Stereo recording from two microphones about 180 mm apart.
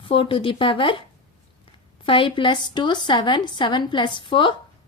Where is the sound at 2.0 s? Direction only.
30° left (ahead or behind).